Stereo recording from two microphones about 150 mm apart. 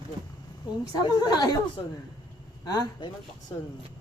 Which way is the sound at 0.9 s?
25° left (ahead or behind).